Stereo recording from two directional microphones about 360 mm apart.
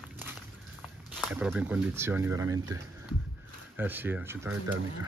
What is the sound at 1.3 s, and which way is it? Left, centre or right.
Speech, centre.